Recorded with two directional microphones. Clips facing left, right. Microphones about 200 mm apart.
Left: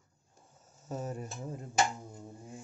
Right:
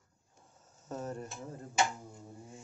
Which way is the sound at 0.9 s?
10° left (ahead or behind).